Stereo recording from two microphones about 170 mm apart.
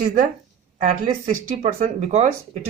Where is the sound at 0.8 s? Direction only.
40° right (ahead or behind).